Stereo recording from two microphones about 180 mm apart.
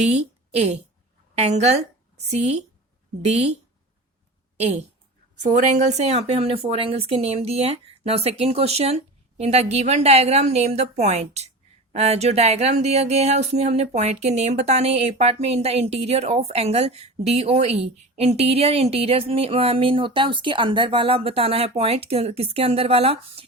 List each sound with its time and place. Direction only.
0.1 s a woman's voice: 40° right (ahead or behind)
4.5 s a woman's voice: 35° right (ahead or behind)